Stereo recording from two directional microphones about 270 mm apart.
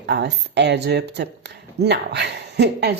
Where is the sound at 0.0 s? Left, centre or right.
Right.